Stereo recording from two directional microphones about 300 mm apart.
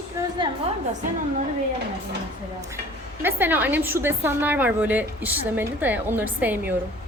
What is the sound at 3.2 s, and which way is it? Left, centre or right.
A woman's voice, centre.